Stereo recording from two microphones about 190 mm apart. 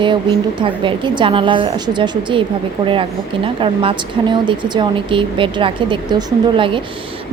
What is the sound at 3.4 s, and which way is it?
A woman's voice, 30° right (ahead or behind).